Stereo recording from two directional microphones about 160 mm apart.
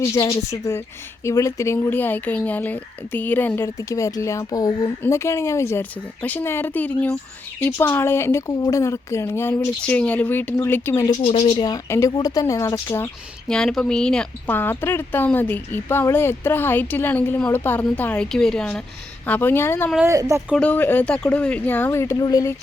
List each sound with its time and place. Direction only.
0.0 s speech: 20° left (ahead or behind)
11.3 s speech: 35° left (ahead or behind); by 13.1 s 15° left (ahead or behind)
13.5 s speech: 5° left (ahead or behind)
20.1 s speech: 20° right (ahead or behind)
20.6 s speech: 10° left (ahead or behind)